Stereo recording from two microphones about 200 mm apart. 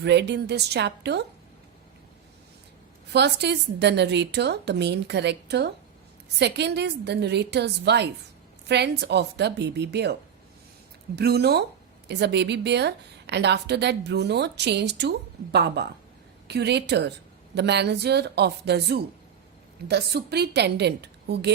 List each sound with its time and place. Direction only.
0.0 s a woman's voice: 55° right (ahead or behind)
3.1 s a woman's voice: 60° right (ahead or behind)